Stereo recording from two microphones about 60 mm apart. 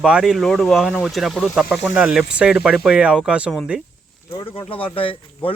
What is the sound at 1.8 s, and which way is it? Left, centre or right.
Speech, right.